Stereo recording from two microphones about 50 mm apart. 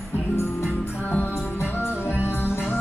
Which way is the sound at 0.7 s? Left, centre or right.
Left.